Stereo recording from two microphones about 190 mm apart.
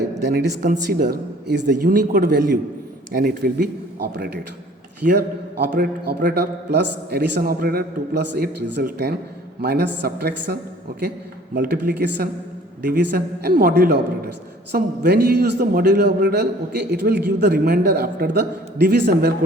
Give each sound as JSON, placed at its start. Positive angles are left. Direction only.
{"t": 0.2, "sound": "a man's voice", "side_deg": -65}
{"t": 0.7, "sound": "a man's voice", "side_deg": -45}
{"t": 5.0, "sound": "a man's voice", "side_deg": -60}